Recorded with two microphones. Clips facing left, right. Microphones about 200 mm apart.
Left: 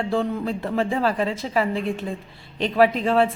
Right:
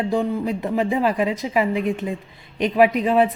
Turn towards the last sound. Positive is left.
turn(degrees=-15)  # may be behind; listen again after turning